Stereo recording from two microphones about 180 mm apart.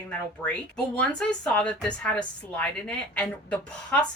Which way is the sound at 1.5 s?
5° left (ahead or behind).